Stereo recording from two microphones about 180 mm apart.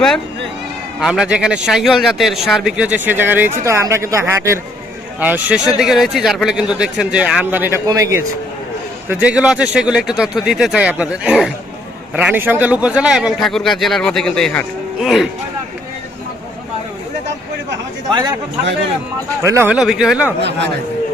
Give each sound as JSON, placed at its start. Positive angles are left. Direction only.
{"t": 0.9, "sound": "a man's voice", "side_deg": -5}
{"t": 19.4, "sound": "speech", "side_deg": -15}